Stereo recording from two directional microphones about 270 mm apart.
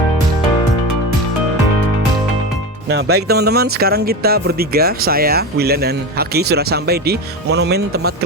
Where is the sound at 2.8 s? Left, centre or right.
Right.